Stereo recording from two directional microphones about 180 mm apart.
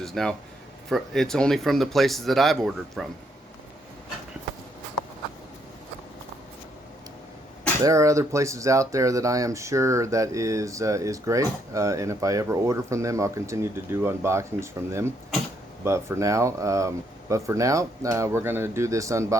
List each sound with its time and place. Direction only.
0.0 s speech: centre (ahead or behind)
7.9 s speech: 15° right (ahead or behind)